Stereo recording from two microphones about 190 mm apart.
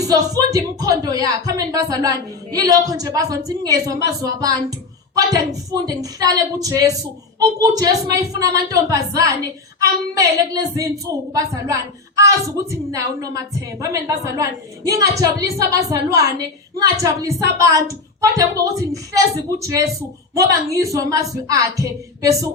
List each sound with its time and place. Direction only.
0.0 s a woman's voice: 20° right (ahead or behind)
13.8 s a woman's voice: 15° right (ahead or behind)
20.3 s a woman's voice: 15° right (ahead or behind)